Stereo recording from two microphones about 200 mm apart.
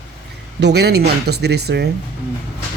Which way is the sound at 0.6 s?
55° right (ahead or behind).